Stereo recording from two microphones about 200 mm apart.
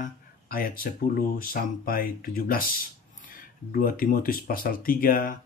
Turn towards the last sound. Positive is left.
turn(degrees=45)  # may be behind; listen again after turning